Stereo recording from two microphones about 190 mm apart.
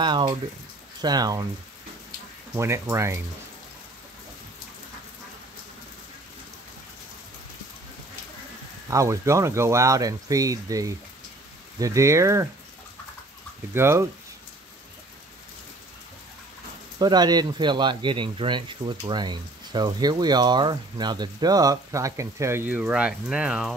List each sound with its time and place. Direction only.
0.0 s speech: 25° right (ahead or behind)
2.5 s speech: 15° right (ahead or behind)
8.9 s speech: 15° right (ahead or behind)
13.7 s speech: 15° right (ahead or behind)
17.0 s speech: 20° right (ahead or behind); by 23.7 s 5° right (ahead or behind)